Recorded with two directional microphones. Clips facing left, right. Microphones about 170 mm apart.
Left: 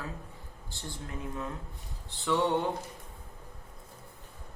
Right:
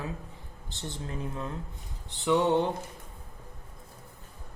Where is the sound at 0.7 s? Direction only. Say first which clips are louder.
Right 4 dB; 20° right (ahead or behind).